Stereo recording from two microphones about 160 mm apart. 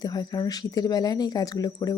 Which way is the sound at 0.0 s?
25° left (ahead or behind).